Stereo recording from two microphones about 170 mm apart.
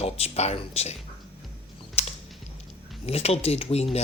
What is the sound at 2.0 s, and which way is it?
Typing, 35° left (ahead or behind).